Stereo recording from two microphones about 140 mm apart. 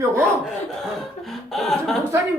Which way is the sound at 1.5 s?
Centre (ahead or behind).